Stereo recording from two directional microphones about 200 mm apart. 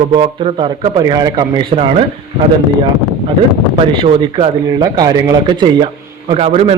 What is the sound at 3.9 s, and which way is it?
A man's voice, 25° right (ahead or behind).